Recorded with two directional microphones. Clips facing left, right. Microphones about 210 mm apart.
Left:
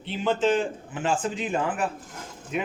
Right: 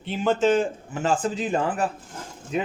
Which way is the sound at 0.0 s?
45° right (ahead or behind).